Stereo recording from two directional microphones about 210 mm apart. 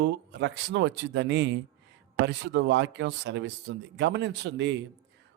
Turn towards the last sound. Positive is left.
turn(degrees=-55)  # may be behind; listen again after turning